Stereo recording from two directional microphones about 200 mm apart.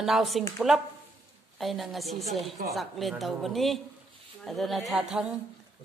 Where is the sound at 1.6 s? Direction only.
Centre (ahead or behind).